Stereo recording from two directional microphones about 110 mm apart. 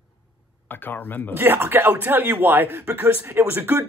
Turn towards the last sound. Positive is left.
turn(degrees=-20)  # may be behind; listen again after turning